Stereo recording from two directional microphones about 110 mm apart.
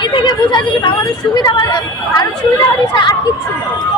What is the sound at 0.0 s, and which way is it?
Speech, 45° left (ahead or behind).